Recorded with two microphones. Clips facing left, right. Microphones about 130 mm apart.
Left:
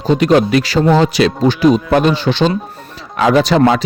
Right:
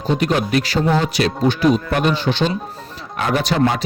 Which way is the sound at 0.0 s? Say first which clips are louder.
Left 7 dB; 90° left.